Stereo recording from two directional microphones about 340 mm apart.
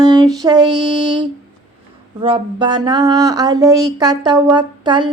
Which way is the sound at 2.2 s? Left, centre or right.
Centre.